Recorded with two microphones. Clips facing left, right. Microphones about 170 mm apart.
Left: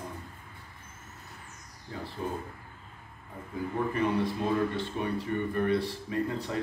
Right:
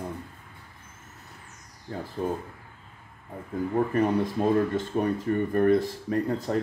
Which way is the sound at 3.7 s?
45° right (ahead or behind).